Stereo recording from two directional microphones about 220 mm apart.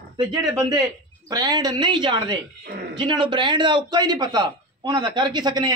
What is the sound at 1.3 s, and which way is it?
A man's voice, 15° right (ahead or behind).